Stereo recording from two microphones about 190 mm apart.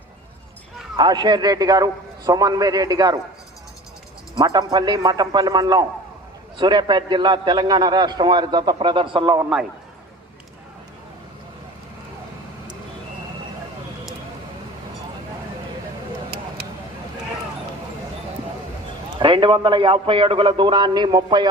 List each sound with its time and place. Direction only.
0.9 s a man's voice: 20° right (ahead or behind)
4.4 s a man's voice: 20° right (ahead or behind)
19.2 s a man's voice: 25° right (ahead or behind)